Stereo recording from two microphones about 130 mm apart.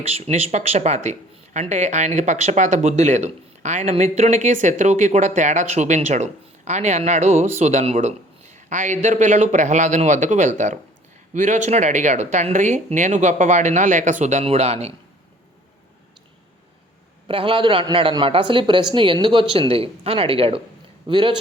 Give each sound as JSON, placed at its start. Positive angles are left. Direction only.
{"t": 0.1, "sound": "speech", "side_deg": -55}
{"t": 17.2, "sound": "a man's voice", "side_deg": -40}